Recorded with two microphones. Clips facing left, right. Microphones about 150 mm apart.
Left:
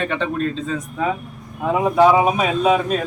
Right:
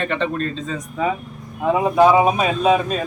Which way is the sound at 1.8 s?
10° right (ahead or behind).